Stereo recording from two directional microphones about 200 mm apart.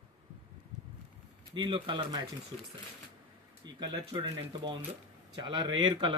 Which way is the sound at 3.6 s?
20° right (ahead or behind).